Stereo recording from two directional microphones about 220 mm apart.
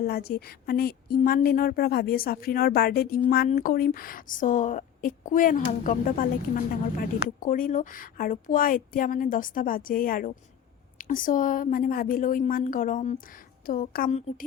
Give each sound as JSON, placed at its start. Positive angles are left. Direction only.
{"t": 0.0, "sound": "speech", "side_deg": 45}